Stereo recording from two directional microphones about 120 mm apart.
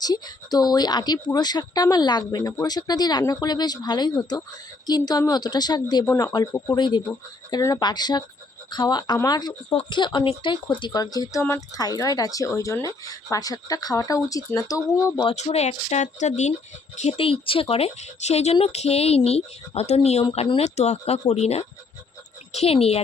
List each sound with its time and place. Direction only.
0.0 s speech: 35° left (ahead or behind)
15.4 s speech: 65° left (ahead or behind)
17.0 s speech: 55° left (ahead or behind)